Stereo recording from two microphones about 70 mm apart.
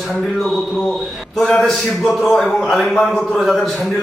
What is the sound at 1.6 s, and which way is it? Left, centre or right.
A man's voice, centre.